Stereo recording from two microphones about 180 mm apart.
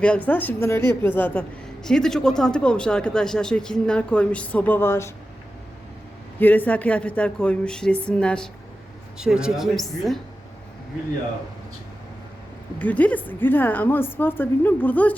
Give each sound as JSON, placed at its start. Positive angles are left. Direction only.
{"t": 0.0, "sound": "a woman's voice", "side_deg": 5}
{"t": 6.4, "sound": "a woman's voice", "side_deg": 10}
{"t": 12.8, "sound": "a woman's voice", "side_deg": 10}